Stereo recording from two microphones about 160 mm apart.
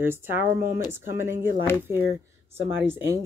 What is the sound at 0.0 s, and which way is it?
Speech, 15° right (ahead or behind).